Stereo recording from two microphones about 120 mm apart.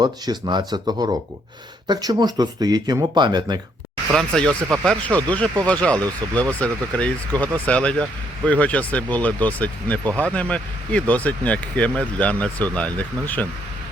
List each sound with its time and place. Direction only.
0.0 s speech: 35° right (ahead or behind)
4.1 s speech: 5° left (ahead or behind)